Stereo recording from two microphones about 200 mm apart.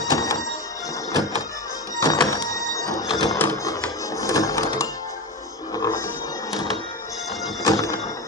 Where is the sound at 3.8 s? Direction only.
15° left (ahead or behind).